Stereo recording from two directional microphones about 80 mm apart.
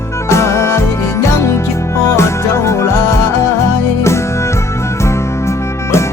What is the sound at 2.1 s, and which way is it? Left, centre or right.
Music, left.